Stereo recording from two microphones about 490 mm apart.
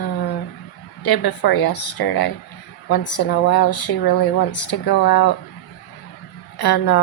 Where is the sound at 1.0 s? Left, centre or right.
Left.